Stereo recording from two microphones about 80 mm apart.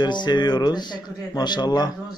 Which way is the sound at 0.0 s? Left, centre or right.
Left.